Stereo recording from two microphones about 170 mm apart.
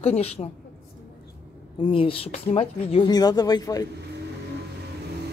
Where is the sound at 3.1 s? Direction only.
25° left (ahead or behind).